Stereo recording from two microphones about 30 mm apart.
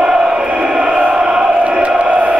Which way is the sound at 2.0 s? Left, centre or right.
Right.